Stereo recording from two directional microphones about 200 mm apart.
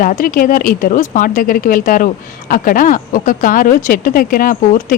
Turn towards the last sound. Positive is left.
turn(degrees=45)  # may be behind; listen again after turning